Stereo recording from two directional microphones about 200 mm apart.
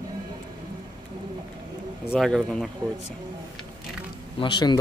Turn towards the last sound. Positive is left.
turn(degrees=20)  # may be behind; listen again after turning